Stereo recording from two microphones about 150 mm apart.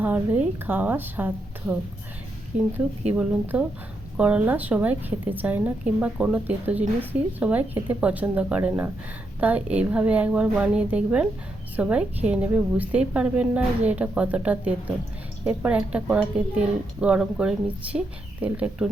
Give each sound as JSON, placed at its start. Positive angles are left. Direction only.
{"t": 0.0, "sound": "a woman's voice", "side_deg": -10}
{"t": 2.5, "sound": "speech", "side_deg": -50}
{"t": 3.1, "sound": "a woman's voice", "side_deg": -10}